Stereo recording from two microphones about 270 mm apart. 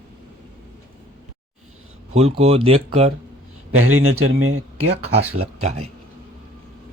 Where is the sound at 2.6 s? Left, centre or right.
Right.